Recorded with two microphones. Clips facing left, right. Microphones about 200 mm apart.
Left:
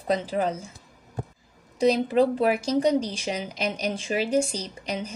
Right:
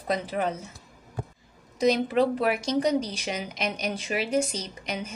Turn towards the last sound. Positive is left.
turn(degrees=35)  # may be behind; listen again after turning